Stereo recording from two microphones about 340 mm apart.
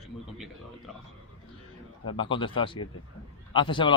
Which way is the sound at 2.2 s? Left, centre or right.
Centre.